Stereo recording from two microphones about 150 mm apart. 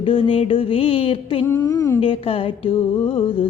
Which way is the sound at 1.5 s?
20° left (ahead or behind).